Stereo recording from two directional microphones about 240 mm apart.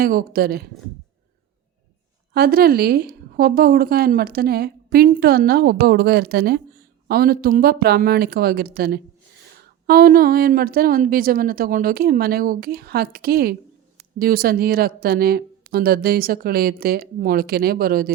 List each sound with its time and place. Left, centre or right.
0.0 s a woman's voice: right
2.3 s a woman's voice: right